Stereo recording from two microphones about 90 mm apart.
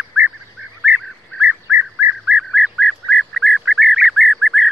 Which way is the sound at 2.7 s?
10° left (ahead or behind).